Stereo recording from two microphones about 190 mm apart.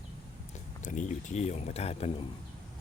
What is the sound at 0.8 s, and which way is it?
Speech, 40° left (ahead or behind).